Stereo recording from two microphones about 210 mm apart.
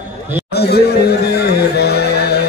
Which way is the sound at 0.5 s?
50° left (ahead or behind).